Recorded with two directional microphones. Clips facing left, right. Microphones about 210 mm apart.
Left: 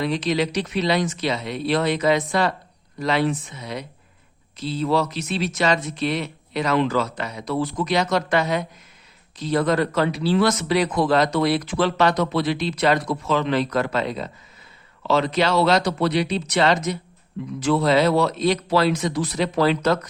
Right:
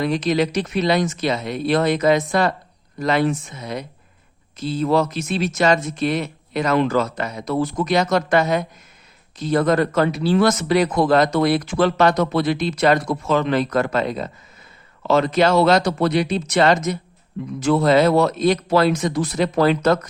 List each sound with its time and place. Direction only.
0.0 s speech: 45° right (ahead or behind)